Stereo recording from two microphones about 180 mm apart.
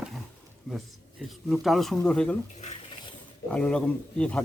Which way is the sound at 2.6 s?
35° left (ahead or behind).